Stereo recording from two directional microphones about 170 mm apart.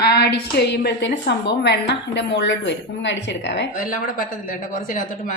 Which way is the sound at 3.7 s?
55° left (ahead or behind).